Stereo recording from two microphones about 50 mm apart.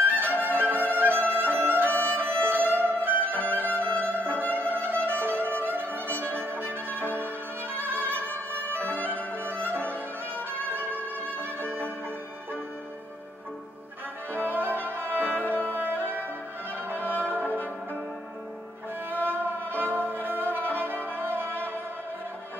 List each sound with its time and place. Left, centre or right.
0.0 s music: right
3.4 s violin: right
3.8 s violin: left
4.5 s music: left
5.0 s music: right
7.7 s music: right
8.7 s music: left
9.5 s violin: right
14.5 s music: right
15.3 s music: left
15.9 s music: right
16.9 s music: left
19.2 s music: right